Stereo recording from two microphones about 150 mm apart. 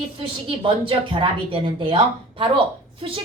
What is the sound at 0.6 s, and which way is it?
Speech, 35° right (ahead or behind).